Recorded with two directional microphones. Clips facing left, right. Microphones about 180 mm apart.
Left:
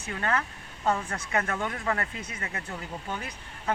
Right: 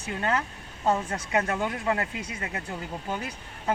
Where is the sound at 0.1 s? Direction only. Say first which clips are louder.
Right 2 dB; 20° right (ahead or behind).